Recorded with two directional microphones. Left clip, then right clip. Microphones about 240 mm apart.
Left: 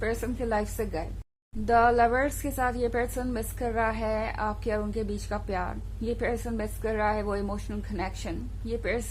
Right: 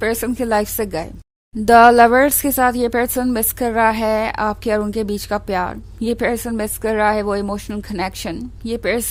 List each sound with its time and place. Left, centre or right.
0.0 s a woman's voice: right